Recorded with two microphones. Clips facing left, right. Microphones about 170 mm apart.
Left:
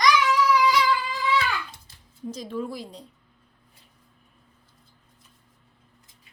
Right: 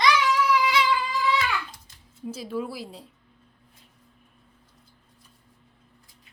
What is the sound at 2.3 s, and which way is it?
Speech, 5° right (ahead or behind).